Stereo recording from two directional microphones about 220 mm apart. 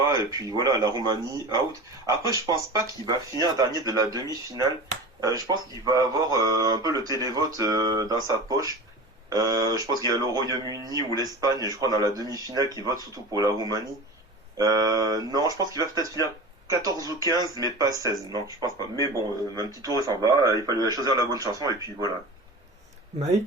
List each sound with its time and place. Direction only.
0.0 s speech: 15° right (ahead or behind)
16.0 s speech: 15° left (ahead or behind)
16.8 s speech: 15° right (ahead or behind)
19.5 s speech: 15° right (ahead or behind)